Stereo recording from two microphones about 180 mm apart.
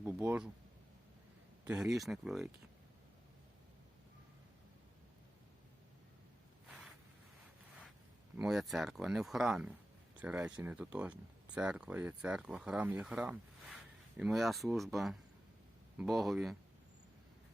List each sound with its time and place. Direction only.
0.0 s speech: 10° right (ahead or behind)
1.6 s speech: 5° right (ahead or behind)
8.4 s speech: centre (ahead or behind)